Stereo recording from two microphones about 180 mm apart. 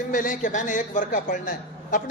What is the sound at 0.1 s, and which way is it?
A woman's voice, 45° left (ahead or behind).